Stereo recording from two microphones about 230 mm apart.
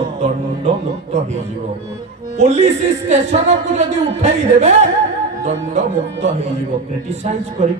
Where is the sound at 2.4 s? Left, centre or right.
Right.